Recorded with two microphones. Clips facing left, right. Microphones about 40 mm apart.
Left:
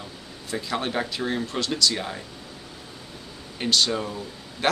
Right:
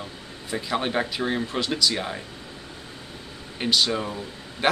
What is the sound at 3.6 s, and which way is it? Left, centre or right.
Speech, centre.